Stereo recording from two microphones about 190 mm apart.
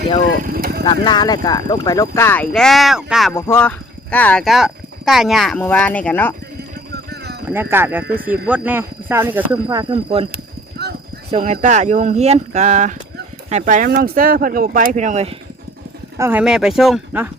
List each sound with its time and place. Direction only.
0.4 s vehicle: 50° right (ahead or behind)
0.9 s speech: 25° left (ahead or behind); by 3.3 s centre (ahead or behind)
3.3 s speech: 15° left (ahead or behind)
7.1 s a sound: 60° right (ahead or behind)
7.4 s speech: 10° right (ahead or behind)
9.6 s speech: 25° right (ahead or behind)
11.3 s speech: 35° right (ahead or behind)
16.1 s speech: 10° right (ahead or behind)